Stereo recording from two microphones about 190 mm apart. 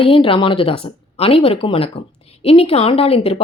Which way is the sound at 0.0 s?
30° left (ahead or behind).